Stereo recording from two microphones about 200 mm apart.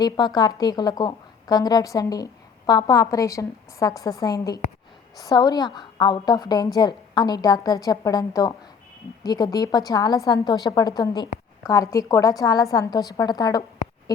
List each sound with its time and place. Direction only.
0.0 s a woman's voice: 20° left (ahead or behind)